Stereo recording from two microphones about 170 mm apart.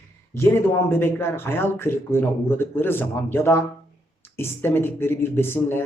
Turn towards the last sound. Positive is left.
turn(degrees=15)  # may be behind; listen again after turning